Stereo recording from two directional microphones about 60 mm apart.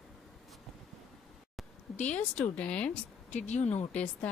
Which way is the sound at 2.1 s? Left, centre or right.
Left.